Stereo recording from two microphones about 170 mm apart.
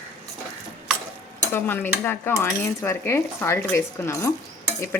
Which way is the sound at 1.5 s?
10° left (ahead or behind).